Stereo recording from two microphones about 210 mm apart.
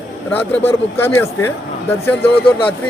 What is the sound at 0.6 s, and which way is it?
Speech, 10° left (ahead or behind).